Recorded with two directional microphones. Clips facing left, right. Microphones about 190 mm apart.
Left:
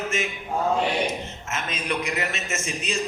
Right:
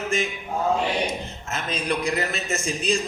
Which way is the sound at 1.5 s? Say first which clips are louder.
Right 2 dB; 35° right (ahead or behind).